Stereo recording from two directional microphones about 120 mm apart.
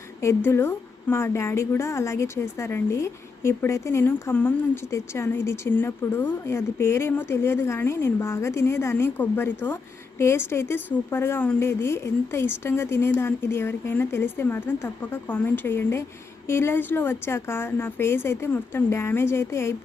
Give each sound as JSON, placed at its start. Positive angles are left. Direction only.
{"t": 0.2, "sound": "a woman's voice", "side_deg": 25}